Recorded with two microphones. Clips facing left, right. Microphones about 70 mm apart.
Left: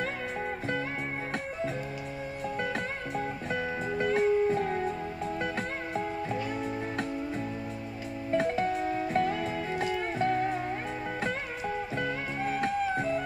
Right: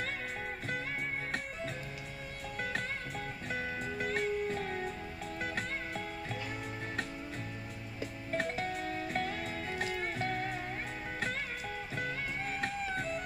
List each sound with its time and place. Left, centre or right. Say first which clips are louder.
3.2 s music: left 9 dB; left
8.4 s music: left 7 dB; centre
8.6 s music: left 8 dB; centre
9.8 s music: left 5 dB; centre
11.6 s music: left 7 dB; left